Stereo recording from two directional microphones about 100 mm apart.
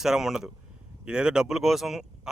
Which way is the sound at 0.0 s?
5° right (ahead or behind).